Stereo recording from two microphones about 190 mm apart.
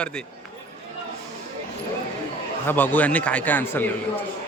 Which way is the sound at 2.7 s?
10° left (ahead or behind).